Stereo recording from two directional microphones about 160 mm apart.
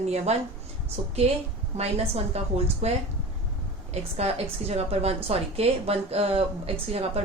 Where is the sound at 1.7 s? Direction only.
40° right (ahead or behind).